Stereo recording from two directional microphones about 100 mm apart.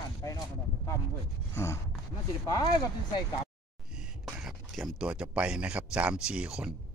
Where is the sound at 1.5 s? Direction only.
30° left (ahead or behind).